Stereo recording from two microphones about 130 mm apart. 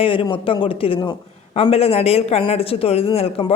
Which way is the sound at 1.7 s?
50° left (ahead or behind).